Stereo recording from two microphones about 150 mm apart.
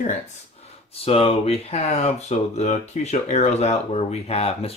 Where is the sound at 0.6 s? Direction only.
40° left (ahead or behind).